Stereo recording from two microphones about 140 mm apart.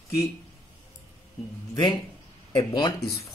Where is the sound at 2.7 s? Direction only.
30° left (ahead or behind).